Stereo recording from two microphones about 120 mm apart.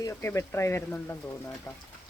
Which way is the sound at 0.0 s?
20° left (ahead or behind).